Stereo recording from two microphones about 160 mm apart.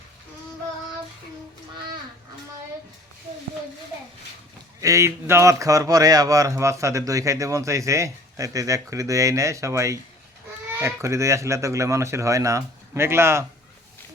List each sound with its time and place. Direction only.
4.8 s speech: 20° right (ahead or behind)